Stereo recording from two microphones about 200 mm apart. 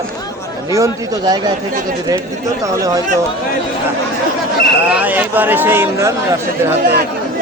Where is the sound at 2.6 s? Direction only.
15° right (ahead or behind).